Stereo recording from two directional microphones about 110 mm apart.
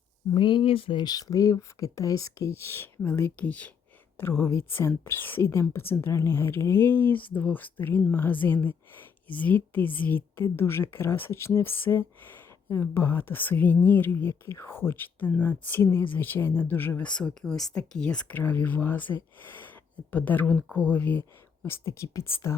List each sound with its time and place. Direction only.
0.3 s speech: 50° left (ahead or behind); by 3.7 s 15° left (ahead or behind)
4.2 s a woman's voice: 25° left (ahead or behind)